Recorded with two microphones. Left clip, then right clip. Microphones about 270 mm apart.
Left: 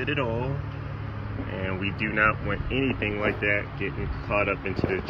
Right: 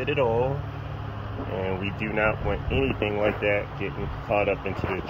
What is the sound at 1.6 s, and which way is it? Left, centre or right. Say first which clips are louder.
Speech: left 3 dB; centre.